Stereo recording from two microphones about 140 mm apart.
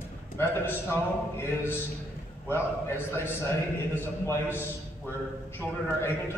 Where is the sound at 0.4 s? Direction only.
15° left (ahead or behind).